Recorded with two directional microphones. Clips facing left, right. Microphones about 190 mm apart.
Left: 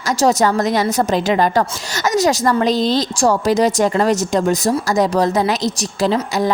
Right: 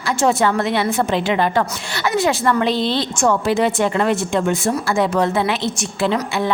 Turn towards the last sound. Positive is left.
turn(degrees=40)  # may be behind; listen again after turning